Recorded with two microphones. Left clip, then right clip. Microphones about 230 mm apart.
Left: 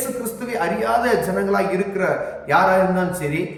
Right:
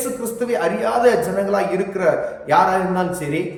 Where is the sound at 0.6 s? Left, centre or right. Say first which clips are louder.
Right 2 dB; centre.